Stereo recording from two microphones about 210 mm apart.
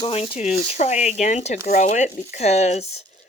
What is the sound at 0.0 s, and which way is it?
Speech, 30° left (ahead or behind).